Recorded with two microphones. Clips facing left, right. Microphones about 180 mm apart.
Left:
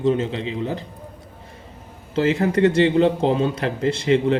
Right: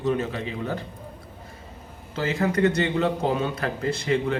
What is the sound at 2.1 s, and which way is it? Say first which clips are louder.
A man's voice: left 5 dB; 30° left (ahead or behind).